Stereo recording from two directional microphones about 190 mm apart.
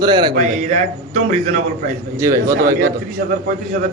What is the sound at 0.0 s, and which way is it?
Speech, 25° right (ahead or behind).